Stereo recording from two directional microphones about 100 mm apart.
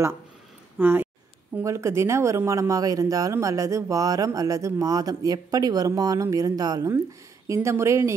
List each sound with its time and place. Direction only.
0.7 s speech: 15° right (ahead or behind)
1.6 s speech: 30° right (ahead or behind)